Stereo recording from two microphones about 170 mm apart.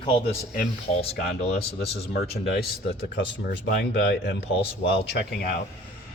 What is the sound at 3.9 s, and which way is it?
Speech, 80° left.